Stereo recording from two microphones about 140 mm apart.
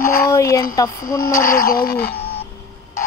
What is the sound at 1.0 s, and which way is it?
Speech, 90° left.